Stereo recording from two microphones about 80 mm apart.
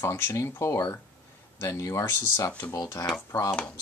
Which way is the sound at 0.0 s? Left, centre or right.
Left.